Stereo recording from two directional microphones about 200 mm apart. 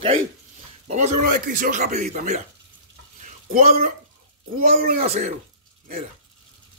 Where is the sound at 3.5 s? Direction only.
45° right (ahead or behind).